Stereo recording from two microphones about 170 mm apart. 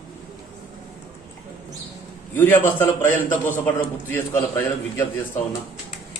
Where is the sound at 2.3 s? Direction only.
10° left (ahead or behind).